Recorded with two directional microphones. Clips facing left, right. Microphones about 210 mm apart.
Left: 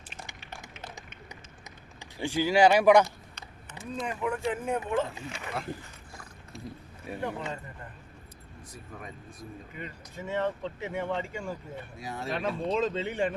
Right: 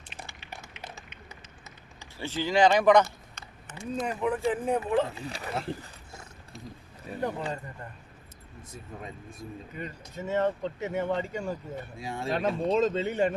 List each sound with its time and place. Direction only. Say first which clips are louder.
2.0 s speech: left 4 dB; 15° left (ahead or behind)
3.9 s speech: right 3 dB; 40° right (ahead or behind)
7.2 s speech: right 3 dB; 40° right (ahead or behind)
8.7 s speech: right 3 dB; 25° right (ahead or behind)
9.7 s speech: right 4 dB; 40° right (ahead or behind)
11.9 s speech: right 3 dB; 25° right (ahead or behind)
12.4 s speech: right 3 dB; 40° right (ahead or behind)